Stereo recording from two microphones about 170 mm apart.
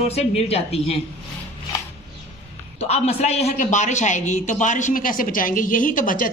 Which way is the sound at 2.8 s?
40° left (ahead or behind).